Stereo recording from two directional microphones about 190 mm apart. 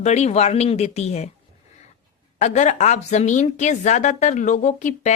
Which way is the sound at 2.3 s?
40° left (ahead or behind).